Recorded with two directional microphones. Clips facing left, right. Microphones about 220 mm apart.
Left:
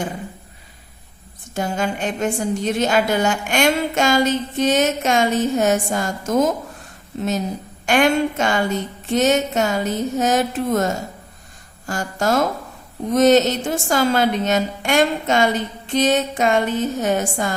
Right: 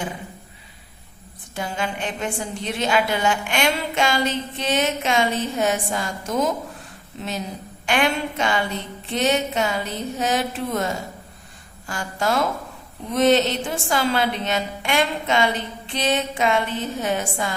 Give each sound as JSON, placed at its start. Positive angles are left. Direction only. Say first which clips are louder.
{"t": 1.5, "sound": "a woman's voice", "louder": "left 5 dB", "side_deg": 45}